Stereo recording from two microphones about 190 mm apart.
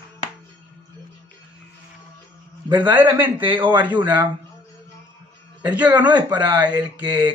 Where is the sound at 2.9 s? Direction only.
10° right (ahead or behind).